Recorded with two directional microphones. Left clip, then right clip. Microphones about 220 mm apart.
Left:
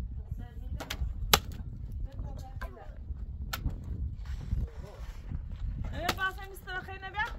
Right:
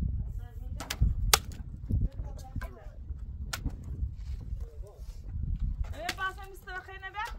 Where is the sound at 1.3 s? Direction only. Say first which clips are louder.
Left 1 dB; 20° left (ahead or behind).